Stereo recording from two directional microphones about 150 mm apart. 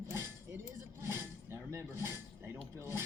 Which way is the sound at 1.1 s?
15° right (ahead or behind).